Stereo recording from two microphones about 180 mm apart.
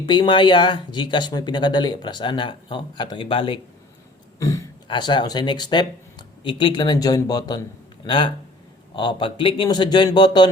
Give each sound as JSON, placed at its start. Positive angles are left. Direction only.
{"t": 0.0, "sound": "speech", "side_deg": 25}
{"t": 4.4, "sound": "speech", "side_deg": 15}